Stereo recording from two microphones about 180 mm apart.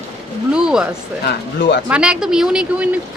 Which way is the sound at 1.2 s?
75° left (ahead or behind).